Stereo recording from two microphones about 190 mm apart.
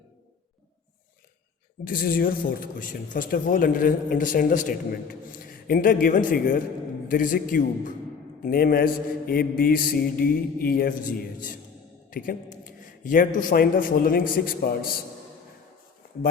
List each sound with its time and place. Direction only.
1.8 s speech: 50° left (ahead or behind)